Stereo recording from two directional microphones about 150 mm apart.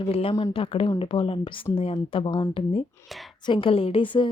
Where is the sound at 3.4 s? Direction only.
35° left (ahead or behind).